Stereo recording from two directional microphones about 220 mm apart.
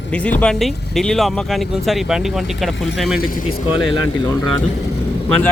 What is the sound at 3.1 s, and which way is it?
Speech, 40° left (ahead or behind).